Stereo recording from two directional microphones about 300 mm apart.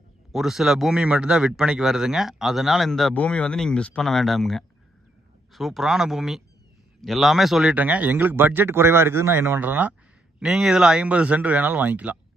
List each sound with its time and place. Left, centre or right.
0.3 s speech: centre